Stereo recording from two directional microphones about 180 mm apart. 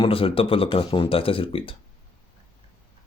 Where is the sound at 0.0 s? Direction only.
30° left (ahead or behind).